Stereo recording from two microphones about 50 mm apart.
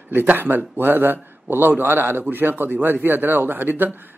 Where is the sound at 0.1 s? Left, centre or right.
Right.